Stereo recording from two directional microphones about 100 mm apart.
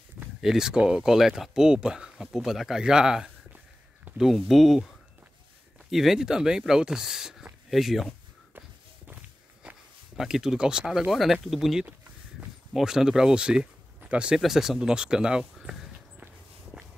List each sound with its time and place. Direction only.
0.4 s speech: 5° right (ahead or behind)
8.5 s walk: 15° right (ahead or behind)
10.1 s speech: 5° right (ahead or behind)
16.7 s walk: 10° right (ahead or behind)